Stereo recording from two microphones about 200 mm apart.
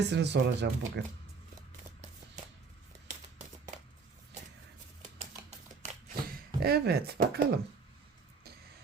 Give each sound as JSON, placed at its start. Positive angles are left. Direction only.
{"t": 0.1, "sound": "speech", "side_deg": -60}
{"t": 2.4, "sound": "music", "side_deg": -40}
{"t": 5.1, "sound": "typewriter", "side_deg": -35}
{"t": 6.3, "sound": "speech", "side_deg": -55}